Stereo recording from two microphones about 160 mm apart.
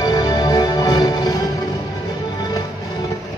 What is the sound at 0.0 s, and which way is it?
Music, 20° left (ahead or behind).